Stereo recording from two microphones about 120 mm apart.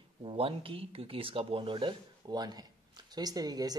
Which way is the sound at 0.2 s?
50° right (ahead or behind).